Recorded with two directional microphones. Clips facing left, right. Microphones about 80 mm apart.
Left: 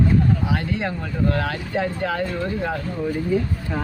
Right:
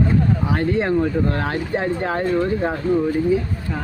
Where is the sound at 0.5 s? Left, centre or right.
Right.